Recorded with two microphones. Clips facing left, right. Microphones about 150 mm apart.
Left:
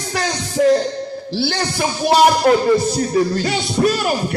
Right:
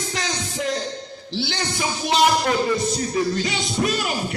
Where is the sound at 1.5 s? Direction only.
55° left (ahead or behind).